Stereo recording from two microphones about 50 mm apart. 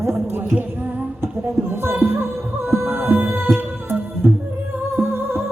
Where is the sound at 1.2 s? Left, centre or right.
Right.